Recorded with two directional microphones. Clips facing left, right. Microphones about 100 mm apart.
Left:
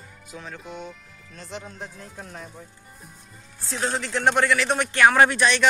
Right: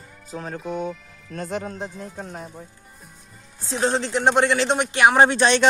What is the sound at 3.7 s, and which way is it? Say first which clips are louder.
Speech: right 5 dB; 25° right (ahead or behind).